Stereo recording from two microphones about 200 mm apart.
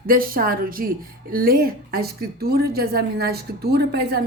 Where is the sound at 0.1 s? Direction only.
45° right (ahead or behind).